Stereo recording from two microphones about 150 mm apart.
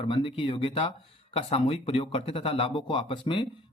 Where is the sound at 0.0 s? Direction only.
35° left (ahead or behind).